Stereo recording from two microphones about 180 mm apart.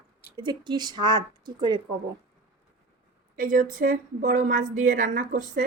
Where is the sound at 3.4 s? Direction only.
50° right (ahead or behind).